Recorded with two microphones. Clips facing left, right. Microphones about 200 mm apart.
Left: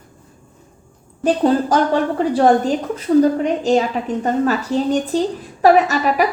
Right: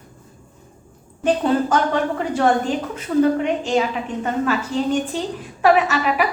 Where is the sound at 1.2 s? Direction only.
35° left (ahead or behind).